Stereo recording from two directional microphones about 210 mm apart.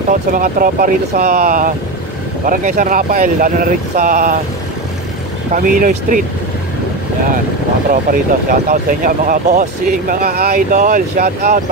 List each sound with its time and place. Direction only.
0.1 s speech: 40° right (ahead or behind)
5.5 s speech: 40° right (ahead or behind)
7.9 s speech: 40° right (ahead or behind)